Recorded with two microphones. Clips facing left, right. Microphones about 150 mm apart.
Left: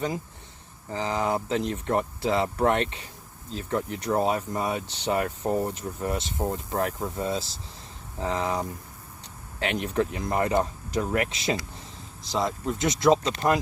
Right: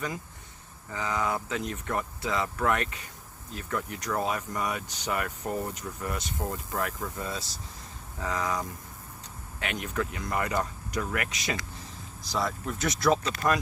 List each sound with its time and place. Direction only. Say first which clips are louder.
0.9 s speech: left 3 dB; 30° left (ahead or behind)